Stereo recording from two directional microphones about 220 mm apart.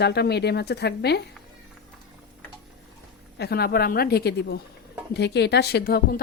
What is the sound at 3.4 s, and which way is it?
A woman's voice, 45° left (ahead or behind).